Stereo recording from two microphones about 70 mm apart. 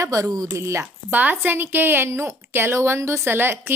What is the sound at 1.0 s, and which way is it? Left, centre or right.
A woman's voice, right.